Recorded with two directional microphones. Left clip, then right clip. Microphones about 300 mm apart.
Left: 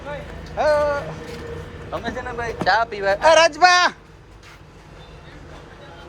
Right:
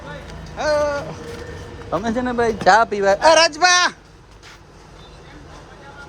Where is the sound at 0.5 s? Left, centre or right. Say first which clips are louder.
Left 1 dB; centre.